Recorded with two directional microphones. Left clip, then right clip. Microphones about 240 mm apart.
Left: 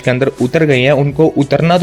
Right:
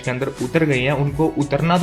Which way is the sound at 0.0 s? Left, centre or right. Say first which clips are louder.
Left 10 dB; left.